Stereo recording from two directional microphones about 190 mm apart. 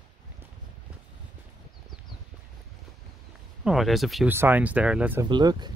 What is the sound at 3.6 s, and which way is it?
Speech, centre (ahead or behind).